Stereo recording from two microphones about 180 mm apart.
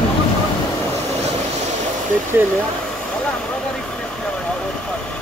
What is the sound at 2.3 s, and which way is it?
Speech, 15° right (ahead or behind).